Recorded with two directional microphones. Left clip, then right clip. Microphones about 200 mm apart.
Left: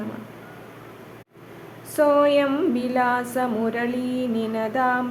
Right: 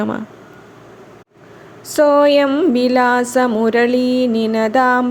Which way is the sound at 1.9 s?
35° right (ahead or behind).